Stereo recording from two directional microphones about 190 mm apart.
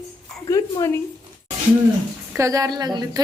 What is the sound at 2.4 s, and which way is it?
Speech, 15° right (ahead or behind).